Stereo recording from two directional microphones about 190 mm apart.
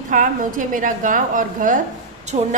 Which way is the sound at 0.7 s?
45° right (ahead or behind).